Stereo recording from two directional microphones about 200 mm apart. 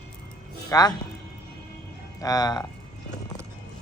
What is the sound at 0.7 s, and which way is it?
Speech, 20° left (ahead or behind).